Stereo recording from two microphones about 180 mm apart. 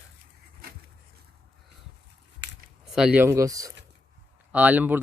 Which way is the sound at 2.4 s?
80° right.